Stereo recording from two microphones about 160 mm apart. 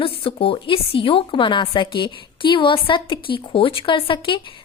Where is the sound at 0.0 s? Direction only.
35° left (ahead or behind).